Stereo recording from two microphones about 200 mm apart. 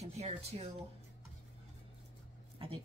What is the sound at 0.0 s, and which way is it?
Speech, 30° right (ahead or behind).